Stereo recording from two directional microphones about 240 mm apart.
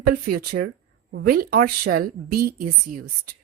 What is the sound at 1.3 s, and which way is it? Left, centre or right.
A woman's voice, right.